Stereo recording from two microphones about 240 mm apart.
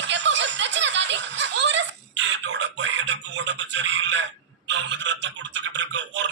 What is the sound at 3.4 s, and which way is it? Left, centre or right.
Frog, right.